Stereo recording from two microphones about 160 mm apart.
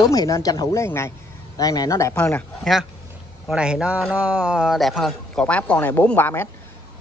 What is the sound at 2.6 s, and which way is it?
A man's voice, centre (ahead or behind).